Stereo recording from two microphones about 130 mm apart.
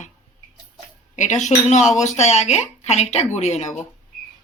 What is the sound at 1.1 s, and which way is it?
Speech, 65° left (ahead or behind).